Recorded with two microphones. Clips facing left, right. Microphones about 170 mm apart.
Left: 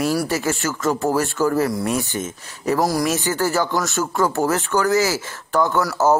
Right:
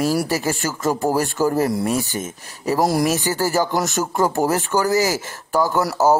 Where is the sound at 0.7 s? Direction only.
15° right (ahead or behind).